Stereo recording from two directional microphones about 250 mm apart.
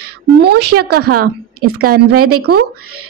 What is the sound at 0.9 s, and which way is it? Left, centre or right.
A woman's voice, right.